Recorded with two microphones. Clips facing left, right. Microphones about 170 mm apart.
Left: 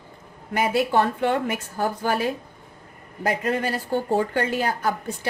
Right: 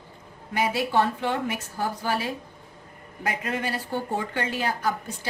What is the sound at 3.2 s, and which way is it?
A woman's voice, 40° left (ahead or behind).